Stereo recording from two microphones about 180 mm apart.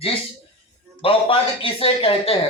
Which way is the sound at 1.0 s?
30° left (ahead or behind).